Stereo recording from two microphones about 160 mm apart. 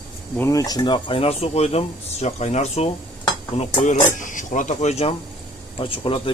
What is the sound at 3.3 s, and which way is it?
Dishes, 35° left (ahead or behind).